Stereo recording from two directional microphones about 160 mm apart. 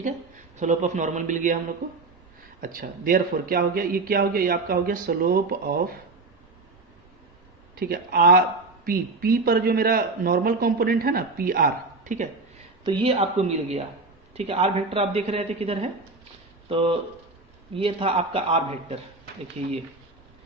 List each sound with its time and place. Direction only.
0.5 s a man's voice: 50° right (ahead or behind)
2.6 s a man's voice: 60° right (ahead or behind)
7.8 s a man's voice: 65° right (ahead or behind)
12.8 s a man's voice: 35° right (ahead or behind)